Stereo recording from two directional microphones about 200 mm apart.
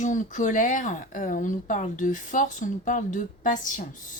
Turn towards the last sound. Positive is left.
turn(degrees=40)  # may be behind; listen again after turning